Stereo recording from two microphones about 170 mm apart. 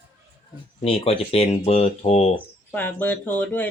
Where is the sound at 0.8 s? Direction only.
35° left (ahead or behind).